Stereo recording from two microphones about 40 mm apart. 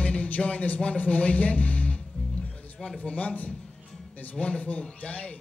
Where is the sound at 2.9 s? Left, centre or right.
Left.